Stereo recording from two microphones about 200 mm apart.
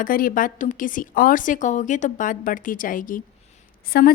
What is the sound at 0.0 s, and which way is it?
A woman's voice, 45° left (ahead or behind).